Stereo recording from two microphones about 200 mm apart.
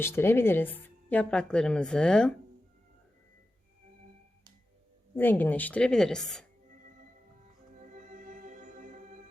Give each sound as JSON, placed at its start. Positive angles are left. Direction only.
{"t": 0.0, "sound": "a woman's voice", "side_deg": 10}
{"t": 5.1, "sound": "a woman's voice", "side_deg": 10}
{"t": 7.7, "sound": "music", "side_deg": -40}